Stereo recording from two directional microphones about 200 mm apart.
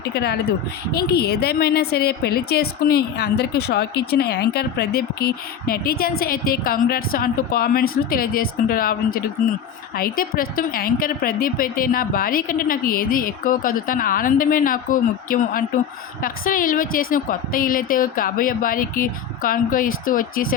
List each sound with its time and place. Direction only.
0.1 s a woman's voice: 55° left (ahead or behind)